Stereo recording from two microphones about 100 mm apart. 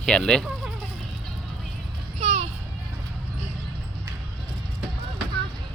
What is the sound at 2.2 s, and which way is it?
Children playing, 90° right.